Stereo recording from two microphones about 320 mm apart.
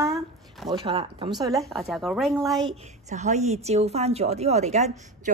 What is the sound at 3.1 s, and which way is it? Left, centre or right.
A woman's voice, right.